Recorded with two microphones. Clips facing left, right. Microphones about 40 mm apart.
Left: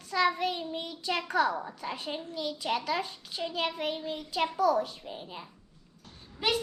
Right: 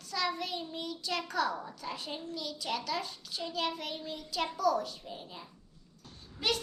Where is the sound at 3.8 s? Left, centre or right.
Left.